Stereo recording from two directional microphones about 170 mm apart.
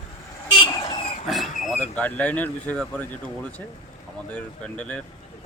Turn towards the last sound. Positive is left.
turn(degrees=5)  # may be behind; listen again after turning